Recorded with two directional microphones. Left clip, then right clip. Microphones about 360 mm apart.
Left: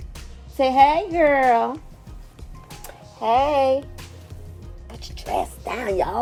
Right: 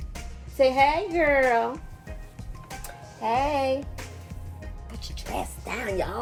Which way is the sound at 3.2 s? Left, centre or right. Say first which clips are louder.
Left 6 dB; left.